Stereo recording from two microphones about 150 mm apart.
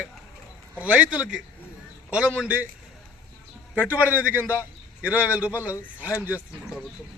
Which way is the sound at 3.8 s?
10° right (ahead or behind).